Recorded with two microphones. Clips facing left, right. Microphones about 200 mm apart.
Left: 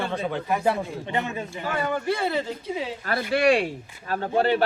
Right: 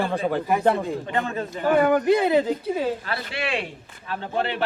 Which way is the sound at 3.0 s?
45° left (ahead or behind).